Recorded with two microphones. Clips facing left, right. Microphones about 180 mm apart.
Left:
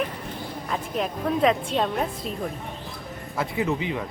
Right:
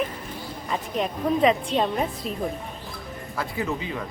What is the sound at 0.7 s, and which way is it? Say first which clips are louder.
A woman's voice: right 1 dB; centre (ahead or behind).